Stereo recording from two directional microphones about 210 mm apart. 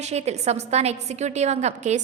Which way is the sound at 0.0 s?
30° right (ahead or behind).